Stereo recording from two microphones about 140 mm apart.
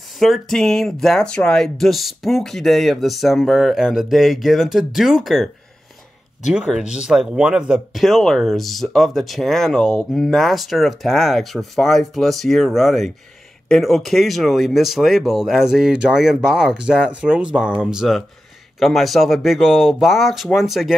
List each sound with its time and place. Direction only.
0.2 s speech: centre (ahead or behind)